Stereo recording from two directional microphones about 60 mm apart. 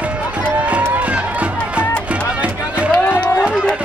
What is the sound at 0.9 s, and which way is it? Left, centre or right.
Music, right.